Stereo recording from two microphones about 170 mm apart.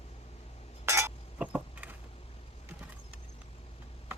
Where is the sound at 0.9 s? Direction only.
15° right (ahead or behind).